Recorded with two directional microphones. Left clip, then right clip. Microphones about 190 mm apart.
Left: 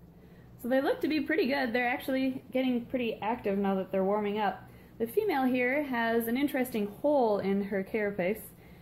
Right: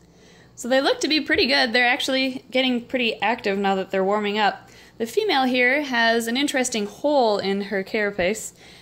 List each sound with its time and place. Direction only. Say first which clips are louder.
0.7 s speech: right 9 dB; 25° right (ahead or behind)